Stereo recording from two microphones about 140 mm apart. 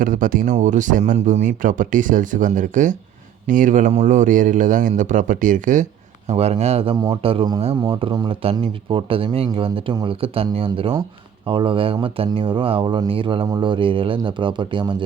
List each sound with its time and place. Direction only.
0.0 s a man's voice: 75° right (ahead or behind)
0.5 s a man's voice: 60° right (ahead or behind)
6.3 s speech: 50° right (ahead or behind)